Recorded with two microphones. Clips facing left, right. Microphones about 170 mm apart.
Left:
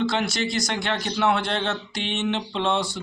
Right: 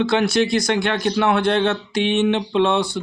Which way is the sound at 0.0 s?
60° right (ahead or behind).